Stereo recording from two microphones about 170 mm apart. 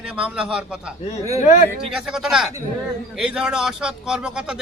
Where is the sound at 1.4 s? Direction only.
45° left (ahead or behind).